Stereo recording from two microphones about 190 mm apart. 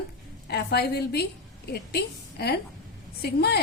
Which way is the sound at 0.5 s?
60° left (ahead or behind).